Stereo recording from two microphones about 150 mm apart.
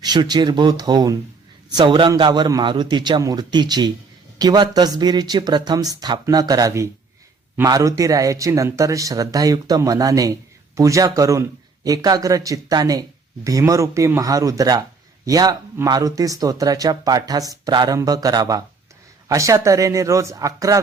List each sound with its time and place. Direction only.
0.0 s a man's voice: 30° right (ahead or behind)